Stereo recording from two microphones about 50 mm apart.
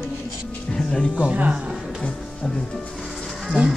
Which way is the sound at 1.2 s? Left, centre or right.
Right.